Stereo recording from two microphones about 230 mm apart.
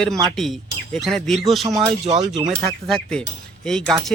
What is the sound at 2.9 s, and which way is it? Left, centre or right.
A man's voice, centre.